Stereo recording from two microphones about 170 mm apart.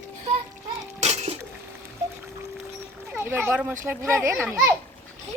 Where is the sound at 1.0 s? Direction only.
40° right (ahead or behind).